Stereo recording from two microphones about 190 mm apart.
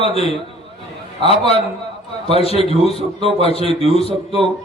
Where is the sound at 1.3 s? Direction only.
30° left (ahead or behind).